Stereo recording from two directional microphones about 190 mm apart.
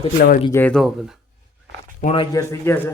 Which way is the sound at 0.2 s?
50° left (ahead or behind).